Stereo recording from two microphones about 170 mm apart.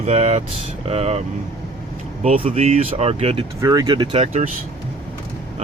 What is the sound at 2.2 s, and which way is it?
Speech, 40° right (ahead or behind).